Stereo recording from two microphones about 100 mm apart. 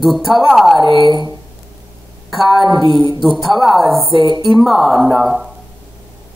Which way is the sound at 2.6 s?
45° right (ahead or behind).